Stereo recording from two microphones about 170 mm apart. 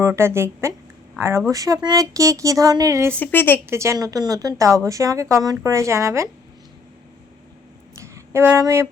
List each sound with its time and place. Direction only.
0.0 s speech: 15° right (ahead or behind)
3.2 s a woman's voice: 10° left (ahead or behind)
3.7 s a woman's voice: 15° right (ahead or behind)
7.9 s a sound: 15° right (ahead or behind)